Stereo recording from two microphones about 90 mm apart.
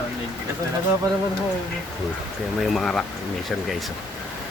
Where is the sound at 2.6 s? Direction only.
Centre (ahead or behind).